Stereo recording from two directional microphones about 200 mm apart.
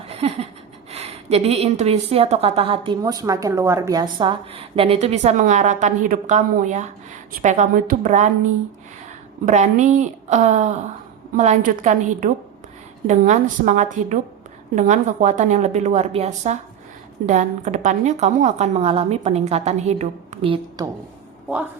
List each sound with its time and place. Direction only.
0.1 s a sound: 30° right (ahead or behind)
0.9 s a woman's voice: 30° right (ahead or behind)
9.5 s a woman's voice: 35° right (ahead or behind)